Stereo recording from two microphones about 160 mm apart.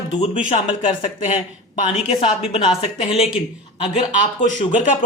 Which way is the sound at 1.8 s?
40° left (ahead or behind).